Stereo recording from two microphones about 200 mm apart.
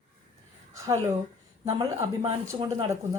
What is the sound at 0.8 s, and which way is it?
A man's voice, 15° right (ahead or behind).